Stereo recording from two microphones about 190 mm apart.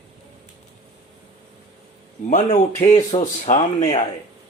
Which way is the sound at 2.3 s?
40° left (ahead or behind).